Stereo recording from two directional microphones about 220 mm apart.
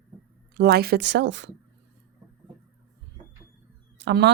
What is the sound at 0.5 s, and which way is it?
Speech, 45° right (ahead or behind).